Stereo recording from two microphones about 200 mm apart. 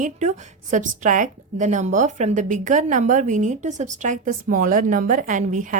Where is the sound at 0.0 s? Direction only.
35° right (ahead or behind).